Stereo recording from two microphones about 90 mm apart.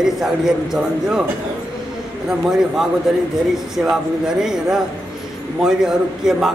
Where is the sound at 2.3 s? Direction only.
5° right (ahead or behind).